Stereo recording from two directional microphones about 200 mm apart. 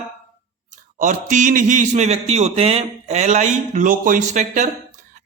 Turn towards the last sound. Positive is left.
turn(degrees=-35)  # may be behind; listen again after turning